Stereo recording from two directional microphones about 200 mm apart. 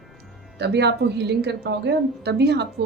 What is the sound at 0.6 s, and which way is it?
Speech, 55° right (ahead or behind).